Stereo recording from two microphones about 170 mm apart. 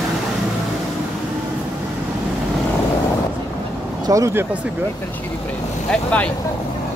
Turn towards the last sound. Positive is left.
turn(degrees=10)  # may be behind; listen again after turning